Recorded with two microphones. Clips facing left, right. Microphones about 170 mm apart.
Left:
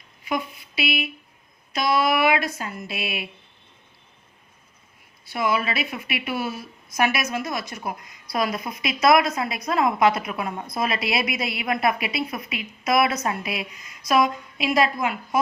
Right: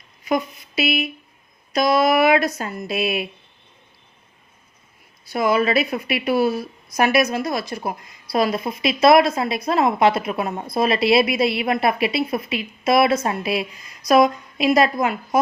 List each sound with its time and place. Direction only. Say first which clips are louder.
0.3 s speech: right 6 dB; 40° right (ahead or behind)
5.2 s a woman's voice: right 5 dB; 40° right (ahead or behind)